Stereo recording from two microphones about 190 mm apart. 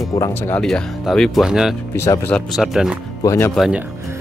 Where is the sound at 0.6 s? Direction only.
Centre (ahead or behind).